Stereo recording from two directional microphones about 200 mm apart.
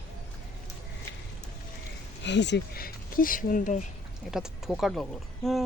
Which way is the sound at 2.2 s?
60° left (ahead or behind).